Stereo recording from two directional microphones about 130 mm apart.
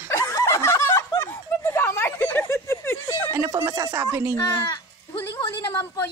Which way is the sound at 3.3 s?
30° right (ahead or behind).